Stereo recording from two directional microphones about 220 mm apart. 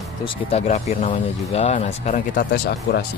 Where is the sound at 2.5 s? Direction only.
50° left (ahead or behind).